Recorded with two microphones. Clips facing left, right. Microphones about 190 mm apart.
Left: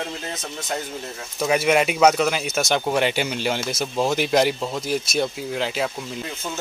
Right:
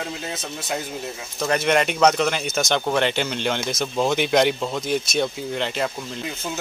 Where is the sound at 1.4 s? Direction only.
5° left (ahead or behind).